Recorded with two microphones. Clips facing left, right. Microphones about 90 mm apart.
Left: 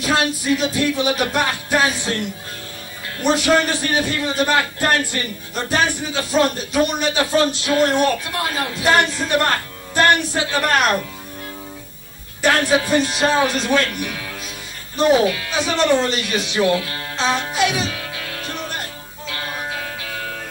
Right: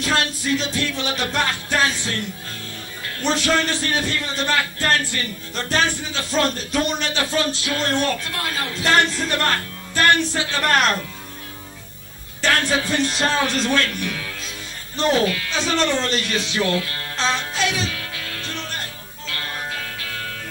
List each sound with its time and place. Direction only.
0.0 s a man's voice: 15° left (ahead or behind)
3.2 s a man's voice: 15° left (ahead or behind)
10.6 s a man's voice: 5° left (ahead or behind)
12.4 s a man's voice: 15° left (ahead or behind)
19.3 s music: 15° left (ahead or behind)